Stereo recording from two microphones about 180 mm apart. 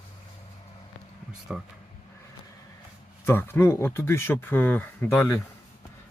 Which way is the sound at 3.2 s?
10° left (ahead or behind).